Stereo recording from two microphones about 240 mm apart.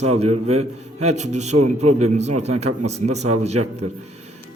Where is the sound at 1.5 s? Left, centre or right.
Right.